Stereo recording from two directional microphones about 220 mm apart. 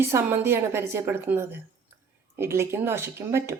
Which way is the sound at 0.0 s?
10° right (ahead or behind).